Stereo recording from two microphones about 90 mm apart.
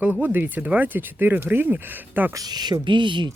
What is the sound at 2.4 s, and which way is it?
Speech, 50° right (ahead or behind).